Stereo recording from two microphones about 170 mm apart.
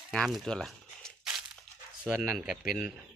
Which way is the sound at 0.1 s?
Centre (ahead or behind).